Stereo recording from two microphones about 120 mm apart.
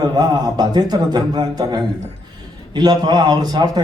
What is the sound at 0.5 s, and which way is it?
A man's voice, 35° right (ahead or behind).